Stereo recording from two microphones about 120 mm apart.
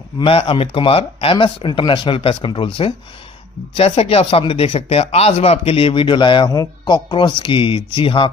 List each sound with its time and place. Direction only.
0.2 s speech: 50° left (ahead or behind)